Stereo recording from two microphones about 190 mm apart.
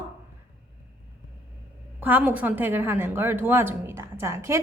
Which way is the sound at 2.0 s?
10° right (ahead or behind).